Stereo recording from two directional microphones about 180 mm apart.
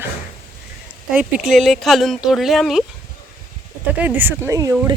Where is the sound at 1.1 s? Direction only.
Centre (ahead or behind).